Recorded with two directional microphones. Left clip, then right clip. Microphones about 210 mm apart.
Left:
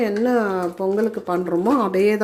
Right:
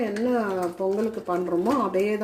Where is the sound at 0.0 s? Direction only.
30° left (ahead or behind).